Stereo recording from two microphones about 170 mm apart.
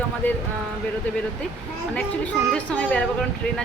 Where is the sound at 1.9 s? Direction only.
10° left (ahead or behind).